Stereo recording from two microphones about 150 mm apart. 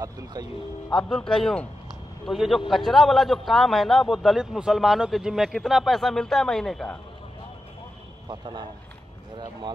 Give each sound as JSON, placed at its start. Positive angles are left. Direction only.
{"t": 0.0, "sound": "speech", "side_deg": -25}
{"t": 0.8, "sound": "a man's voice", "side_deg": 5}
{"t": 8.3, "sound": "speech", "side_deg": -30}